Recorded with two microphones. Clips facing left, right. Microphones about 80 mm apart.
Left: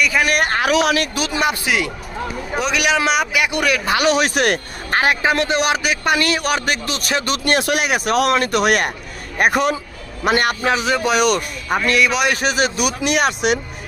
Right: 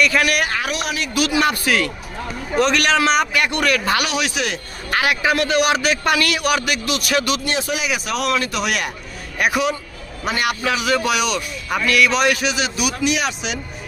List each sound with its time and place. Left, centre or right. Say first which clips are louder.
0.0 s a man's voice: right 1 dB; centre
0.3 s speech: left 2 dB; left
0.6 s a man's voice: left 8 dB; left
1.1 s a man's voice: right 3 dB; left
1.4 s speech: left 1 dB; centre
4.0 s speech: left 6 dB; left
4.9 s a man's voice: left 2 dB; left
7.4 s a man's voice: left 4 dB; left
11.1 s speech: left 4 dB; left
11.9 s a man's voice: right 1 dB; left
12.3 s speech: left 2 dB; left